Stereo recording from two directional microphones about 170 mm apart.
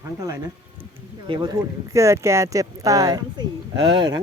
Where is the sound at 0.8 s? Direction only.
30° right (ahead or behind).